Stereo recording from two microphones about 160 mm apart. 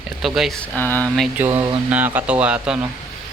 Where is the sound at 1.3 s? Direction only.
10° right (ahead or behind).